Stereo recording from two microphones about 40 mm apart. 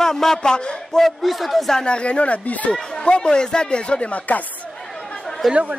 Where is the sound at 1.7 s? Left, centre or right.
Left.